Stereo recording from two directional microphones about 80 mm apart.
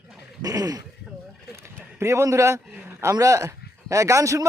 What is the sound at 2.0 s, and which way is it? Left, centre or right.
Speech, right.